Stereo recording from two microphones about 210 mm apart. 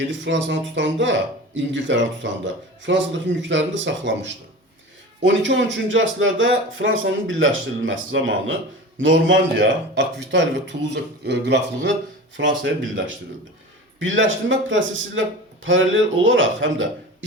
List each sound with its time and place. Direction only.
0.0 s speech: 60° right (ahead or behind)